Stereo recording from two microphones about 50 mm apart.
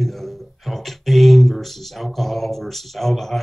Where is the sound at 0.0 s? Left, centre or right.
Centre.